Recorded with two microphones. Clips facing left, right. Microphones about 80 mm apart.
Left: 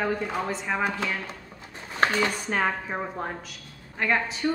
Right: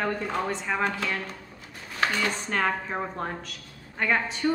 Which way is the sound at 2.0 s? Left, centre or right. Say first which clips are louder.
Left 3 dB; left.